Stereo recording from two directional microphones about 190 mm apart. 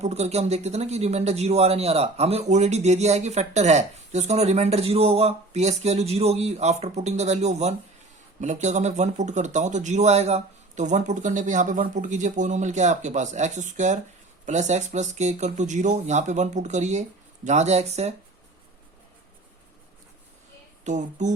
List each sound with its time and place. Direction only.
0.0 s speech: 35° right (ahead or behind)
20.8 s speech: 40° right (ahead or behind)